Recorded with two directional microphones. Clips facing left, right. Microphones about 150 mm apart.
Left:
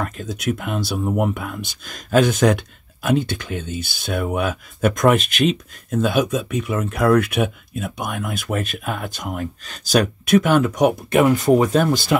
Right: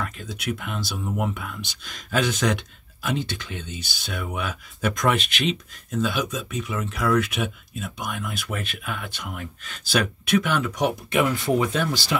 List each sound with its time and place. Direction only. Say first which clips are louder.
0.0 s speech: left 6 dB; 45° left (ahead or behind)